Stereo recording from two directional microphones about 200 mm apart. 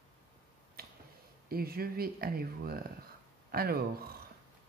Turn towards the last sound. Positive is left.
turn(degrees=-50)  # may be behind; listen again after turning